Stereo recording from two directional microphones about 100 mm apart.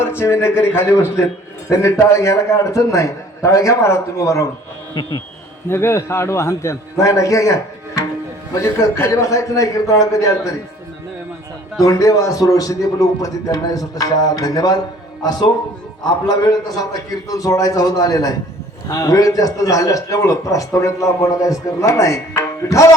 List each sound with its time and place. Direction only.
0.0 s a man's voice: 25° left (ahead or behind)
5.6 s a man's voice: 25° left (ahead or behind)
11.8 s a man's voice: 35° left (ahead or behind)